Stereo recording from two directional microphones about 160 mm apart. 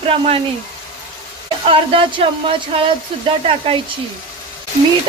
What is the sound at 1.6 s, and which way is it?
Speech, 35° right (ahead or behind).